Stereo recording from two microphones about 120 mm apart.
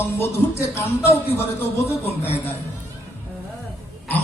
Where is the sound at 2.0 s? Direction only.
55° left (ahead or behind).